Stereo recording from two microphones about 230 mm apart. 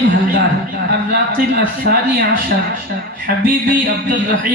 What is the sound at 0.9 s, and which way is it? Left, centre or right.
A man's voice, right.